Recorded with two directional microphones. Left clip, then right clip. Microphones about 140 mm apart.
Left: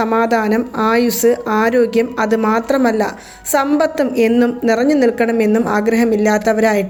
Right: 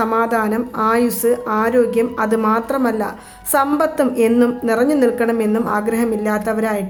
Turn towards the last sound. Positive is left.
turn(degrees=25)  # may be behind; listen again after turning